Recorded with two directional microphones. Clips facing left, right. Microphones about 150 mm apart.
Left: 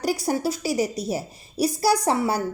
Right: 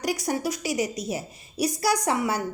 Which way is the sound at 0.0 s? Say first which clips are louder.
Left 3 dB; 35° left (ahead or behind).